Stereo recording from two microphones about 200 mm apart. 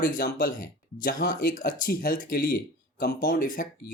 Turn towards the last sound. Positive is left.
turn(degrees=45)  # may be behind; listen again after turning